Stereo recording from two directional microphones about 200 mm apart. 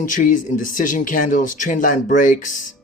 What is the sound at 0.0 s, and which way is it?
A man's voice, 40° left (ahead or behind).